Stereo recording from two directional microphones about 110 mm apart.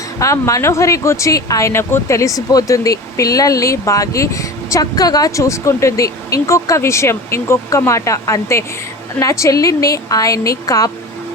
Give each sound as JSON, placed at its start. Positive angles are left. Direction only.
{"t": 0.2, "sound": "a woman's voice", "side_deg": 30}